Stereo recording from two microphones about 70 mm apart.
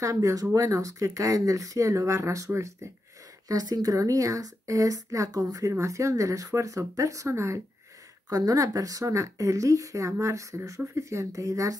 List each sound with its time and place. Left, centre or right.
0.0 s speech: right
3.4 s speech: right
8.3 s speech: right